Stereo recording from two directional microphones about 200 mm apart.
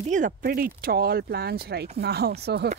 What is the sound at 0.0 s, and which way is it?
Speech, 40° right (ahead or behind).